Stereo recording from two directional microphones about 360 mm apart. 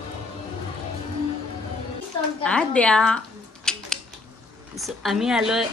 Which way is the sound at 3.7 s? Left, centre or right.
Centre.